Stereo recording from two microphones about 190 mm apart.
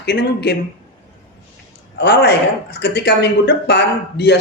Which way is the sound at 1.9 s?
60° left (ahead or behind).